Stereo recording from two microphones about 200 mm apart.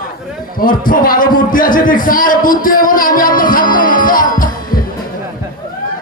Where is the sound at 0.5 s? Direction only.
45° left (ahead or behind).